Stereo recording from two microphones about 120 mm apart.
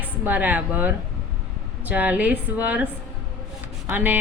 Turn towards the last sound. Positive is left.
turn(degrees=-15)  # may be behind; listen again after turning